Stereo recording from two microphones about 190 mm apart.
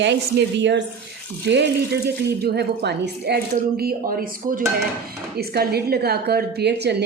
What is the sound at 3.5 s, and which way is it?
A woman's voice, 50° right (ahead or behind).